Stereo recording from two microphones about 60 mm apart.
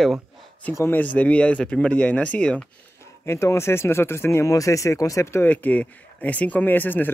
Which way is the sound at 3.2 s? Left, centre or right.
Left.